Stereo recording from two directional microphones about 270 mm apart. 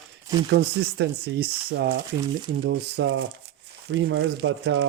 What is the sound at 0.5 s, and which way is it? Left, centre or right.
Speech, right.